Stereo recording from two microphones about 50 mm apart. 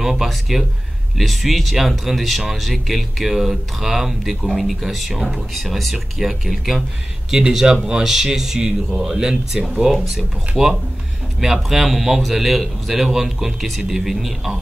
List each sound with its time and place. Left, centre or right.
0.0 s speech: centre
7.2 s speech: centre
9.8 s speech: centre
10.5 s speech: centre